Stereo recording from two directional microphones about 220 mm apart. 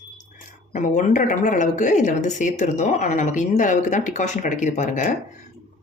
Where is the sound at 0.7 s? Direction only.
35° left (ahead or behind).